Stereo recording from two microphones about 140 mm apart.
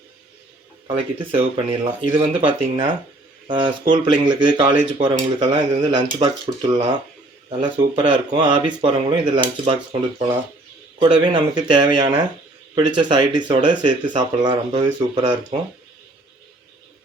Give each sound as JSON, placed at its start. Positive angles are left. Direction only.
{"t": 0.9, "sound": "speech", "side_deg": -40}
{"t": 6.1, "sound": "speech", "side_deg": -45}
{"t": 11.0, "sound": "speech", "side_deg": -35}